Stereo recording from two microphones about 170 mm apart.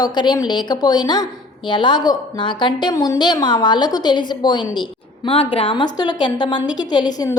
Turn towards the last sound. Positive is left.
turn(degrees=20)  # may be behind; listen again after turning